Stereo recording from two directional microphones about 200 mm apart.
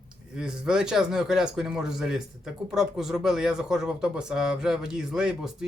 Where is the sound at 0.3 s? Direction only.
5° right (ahead or behind).